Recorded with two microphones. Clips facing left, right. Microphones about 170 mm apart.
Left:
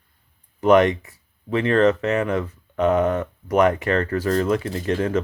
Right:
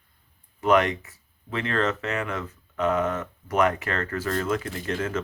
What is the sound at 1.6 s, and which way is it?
Speech, 35° left (ahead or behind).